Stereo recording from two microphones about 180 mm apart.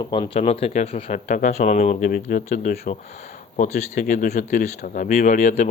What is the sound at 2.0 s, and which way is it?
Speech, 50° left (ahead or behind).